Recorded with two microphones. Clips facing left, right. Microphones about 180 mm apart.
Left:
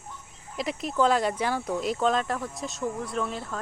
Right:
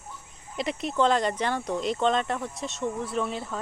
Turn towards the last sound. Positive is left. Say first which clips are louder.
# right 1 dB
turn(degrees=0)  # may be behind; listen again after turning